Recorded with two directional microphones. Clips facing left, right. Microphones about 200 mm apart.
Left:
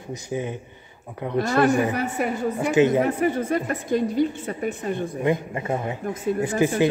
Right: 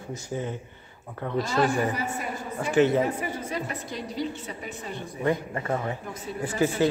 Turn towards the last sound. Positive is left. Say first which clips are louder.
# left 3 dB
turn(degrees=15)  # may be behind; listen again after turning